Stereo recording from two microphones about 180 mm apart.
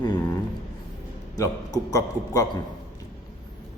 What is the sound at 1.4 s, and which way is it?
A man's voice, 20° left (ahead or behind).